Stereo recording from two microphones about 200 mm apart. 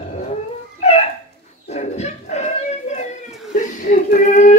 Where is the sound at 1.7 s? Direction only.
35° left (ahead or behind).